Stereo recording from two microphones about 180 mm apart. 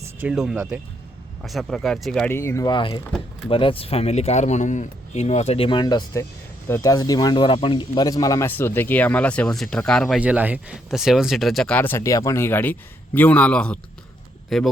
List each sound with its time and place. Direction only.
0.2 s speech: 5° right (ahead or behind)
10.2 s speech: 5° right (ahead or behind)